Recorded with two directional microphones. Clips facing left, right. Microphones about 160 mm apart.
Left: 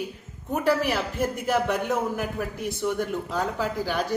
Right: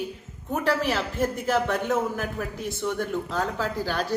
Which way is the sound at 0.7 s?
15° left (ahead or behind).